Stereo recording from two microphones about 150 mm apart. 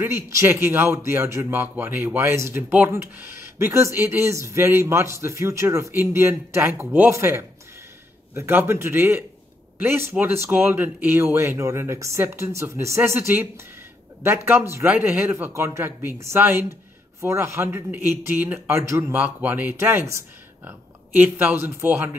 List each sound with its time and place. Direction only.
0.0 s a man's voice: 15° right (ahead or behind)